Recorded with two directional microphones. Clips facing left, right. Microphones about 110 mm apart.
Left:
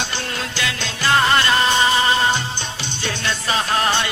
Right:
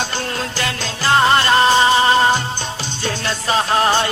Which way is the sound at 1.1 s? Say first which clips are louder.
Right 3 dB; 35° right (ahead or behind).